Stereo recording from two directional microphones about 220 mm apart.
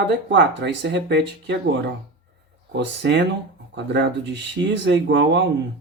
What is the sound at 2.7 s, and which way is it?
Speech, 50° right (ahead or behind).